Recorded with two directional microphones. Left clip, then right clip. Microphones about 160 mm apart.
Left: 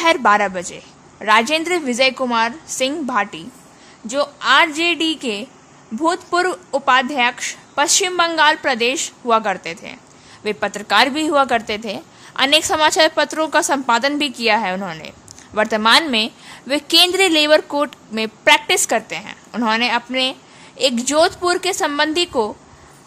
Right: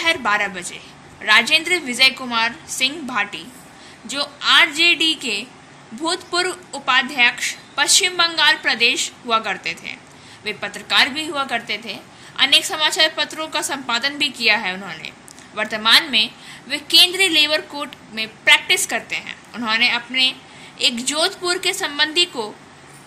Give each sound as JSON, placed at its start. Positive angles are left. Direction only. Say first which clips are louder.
{"t": 0.0, "sound": "a woman's voice", "louder": "left 4 dB", "side_deg": 50}